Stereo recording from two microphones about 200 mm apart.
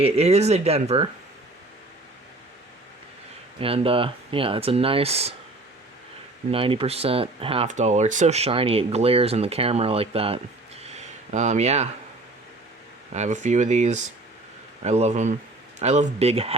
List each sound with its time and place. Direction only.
0.0 s speech: 30° right (ahead or behind)
3.6 s speech: 30° right (ahead or behind)
6.5 s speech: 25° right (ahead or behind)
10.8 s a sound: 35° right (ahead or behind)
13.1 s speech: 35° right (ahead or behind)